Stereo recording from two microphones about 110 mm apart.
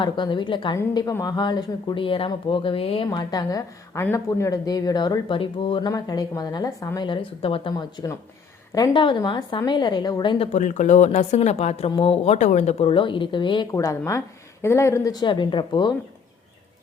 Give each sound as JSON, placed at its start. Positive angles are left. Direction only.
{"t": 0.0, "sound": "a woman's voice", "side_deg": 45}
{"t": 2.0, "sound": "a woman's voice", "side_deg": 50}
{"t": 3.1, "sound": "speech", "side_deg": 35}
{"t": 7.1, "sound": "a woman's voice", "side_deg": 55}
{"t": 7.8, "sound": "a woman's voice", "side_deg": 40}
{"t": 10.5, "sound": "speech", "side_deg": 90}
{"t": 11.9, "sound": "speech", "side_deg": 60}
{"t": 12.9, "sound": "a woman's voice", "side_deg": 50}
{"t": 13.7, "sound": "speech", "side_deg": 30}
{"t": 15.1, "sound": "a woman's voice", "side_deg": 45}